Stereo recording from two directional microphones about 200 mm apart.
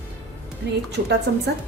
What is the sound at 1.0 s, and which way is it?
Speech, 60° right (ahead or behind).